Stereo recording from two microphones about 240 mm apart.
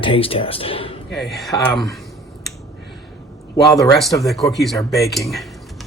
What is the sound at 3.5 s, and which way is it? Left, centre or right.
Speech, centre.